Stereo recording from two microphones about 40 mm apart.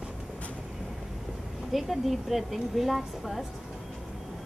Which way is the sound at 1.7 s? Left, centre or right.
Centre.